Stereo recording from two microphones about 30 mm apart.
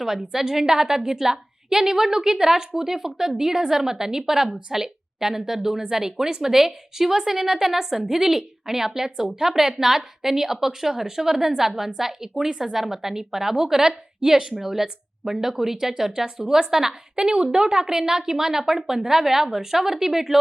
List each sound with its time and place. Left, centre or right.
0.0 s a woman's voice: centre
14.5 s a woman's voice: centre
17.3 s a woman's voice: right; by 20.4 s centre